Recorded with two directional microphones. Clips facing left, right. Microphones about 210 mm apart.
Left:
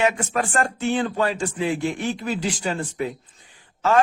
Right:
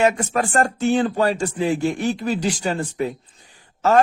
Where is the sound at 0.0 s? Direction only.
40° right (ahead or behind).